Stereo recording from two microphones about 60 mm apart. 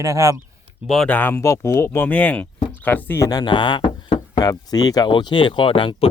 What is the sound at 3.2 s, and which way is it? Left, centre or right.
Speech, left.